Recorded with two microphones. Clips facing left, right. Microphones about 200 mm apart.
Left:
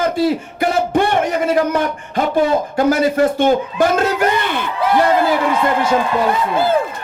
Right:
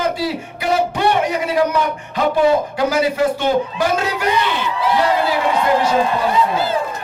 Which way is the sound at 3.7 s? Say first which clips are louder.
Left 4 dB; 50° left (ahead or behind).